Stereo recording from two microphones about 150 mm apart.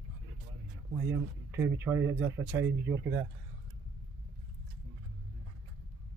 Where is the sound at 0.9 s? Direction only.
15° right (ahead or behind).